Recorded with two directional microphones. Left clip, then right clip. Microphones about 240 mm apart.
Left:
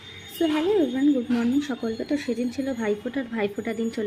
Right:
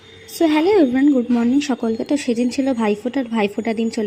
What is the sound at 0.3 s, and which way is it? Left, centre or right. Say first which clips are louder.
Speech: right 8 dB; right.